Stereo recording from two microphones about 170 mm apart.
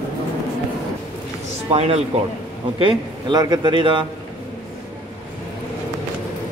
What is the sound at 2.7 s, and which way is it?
A man's voice, 30° right (ahead or behind).